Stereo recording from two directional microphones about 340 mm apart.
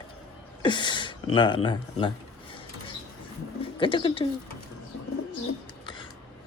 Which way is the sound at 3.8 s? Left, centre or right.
Centre.